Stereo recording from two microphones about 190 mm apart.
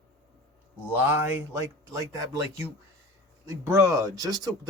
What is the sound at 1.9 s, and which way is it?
Speech, 15° right (ahead or behind).